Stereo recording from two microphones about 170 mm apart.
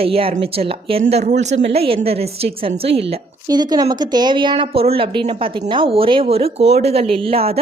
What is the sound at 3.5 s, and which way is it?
A woman's voice, 25° right (ahead or behind).